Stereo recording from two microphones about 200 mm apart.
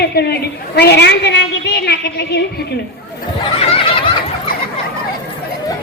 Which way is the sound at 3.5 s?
25° left (ahead or behind).